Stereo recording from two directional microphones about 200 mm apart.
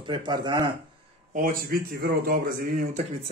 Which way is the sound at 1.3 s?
45° right (ahead or behind).